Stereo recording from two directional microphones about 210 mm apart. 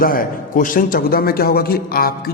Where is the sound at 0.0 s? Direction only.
40° left (ahead or behind).